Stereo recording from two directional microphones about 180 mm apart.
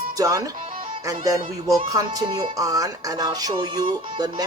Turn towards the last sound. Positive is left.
turn(degrees=-20)  # may be behind; listen again after turning